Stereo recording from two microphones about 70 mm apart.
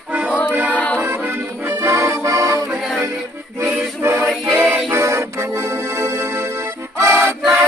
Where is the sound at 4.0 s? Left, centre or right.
Right.